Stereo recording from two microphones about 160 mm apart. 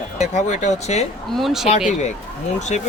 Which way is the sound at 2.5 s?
50° left (ahead or behind).